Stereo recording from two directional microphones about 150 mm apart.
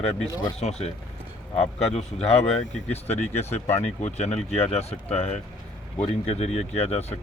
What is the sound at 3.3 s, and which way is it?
Speech, 45° left (ahead or behind).